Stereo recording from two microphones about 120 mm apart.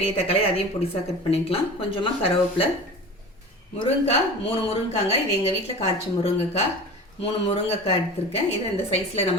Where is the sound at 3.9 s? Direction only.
60° left (ahead or behind).